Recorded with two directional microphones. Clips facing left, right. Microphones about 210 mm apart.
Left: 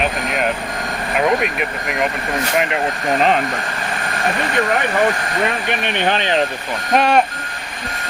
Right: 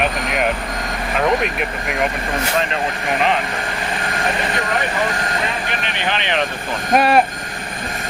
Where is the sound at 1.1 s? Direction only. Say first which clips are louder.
Left 1 dB; centre (ahead or behind).